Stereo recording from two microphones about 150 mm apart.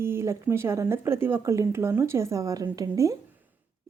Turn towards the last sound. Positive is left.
turn(degrees=-20)  # may be behind; listen again after turning